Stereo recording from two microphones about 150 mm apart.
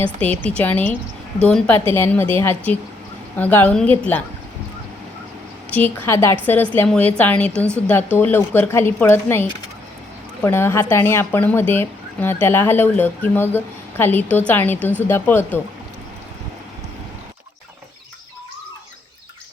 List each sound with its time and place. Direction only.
0.2 s speech: 10° left (ahead or behind)
5.7 s speech: 10° left (ahead or behind)